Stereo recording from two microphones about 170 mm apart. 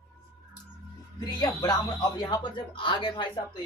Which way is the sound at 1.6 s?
20° left (ahead or behind).